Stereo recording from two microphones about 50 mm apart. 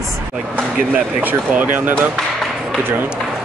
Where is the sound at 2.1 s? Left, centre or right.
Centre.